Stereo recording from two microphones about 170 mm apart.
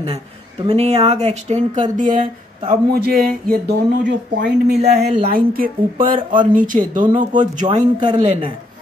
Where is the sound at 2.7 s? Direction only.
60° right (ahead or behind).